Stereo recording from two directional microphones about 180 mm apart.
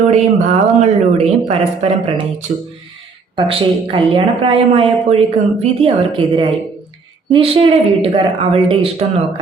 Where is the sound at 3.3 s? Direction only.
30° right (ahead or behind).